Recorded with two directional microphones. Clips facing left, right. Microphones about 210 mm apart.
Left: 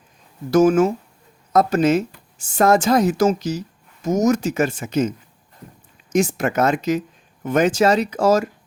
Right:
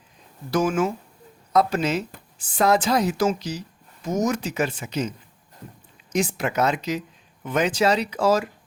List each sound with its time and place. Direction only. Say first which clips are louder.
0.5 s a woman's voice: left 8 dB; 45° left (ahead or behind)